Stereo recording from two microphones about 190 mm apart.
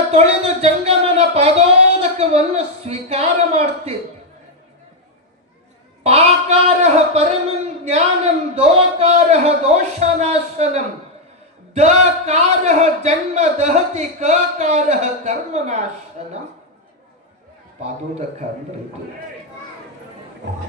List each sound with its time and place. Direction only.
0.1 s speech: 35° right (ahead or behind)
6.0 s speech: 35° right (ahead or behind)
17.8 s speech: 35° right (ahead or behind)